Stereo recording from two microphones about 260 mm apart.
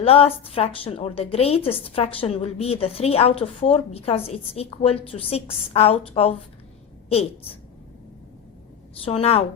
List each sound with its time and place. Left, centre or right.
0.0 s a woman's voice: left
9.0 s a woman's voice: left